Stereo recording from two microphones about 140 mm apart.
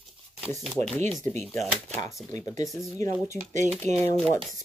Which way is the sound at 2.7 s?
20° left (ahead or behind).